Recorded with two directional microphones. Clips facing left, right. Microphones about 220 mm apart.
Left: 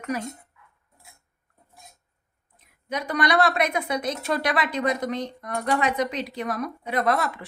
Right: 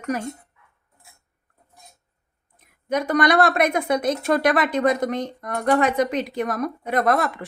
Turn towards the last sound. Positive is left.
turn(degrees=-50)  # may be behind; listen again after turning